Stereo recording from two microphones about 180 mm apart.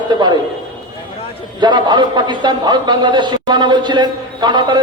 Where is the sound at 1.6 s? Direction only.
25° right (ahead or behind).